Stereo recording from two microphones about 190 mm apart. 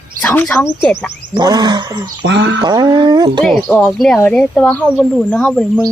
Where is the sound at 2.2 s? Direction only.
70° right (ahead or behind).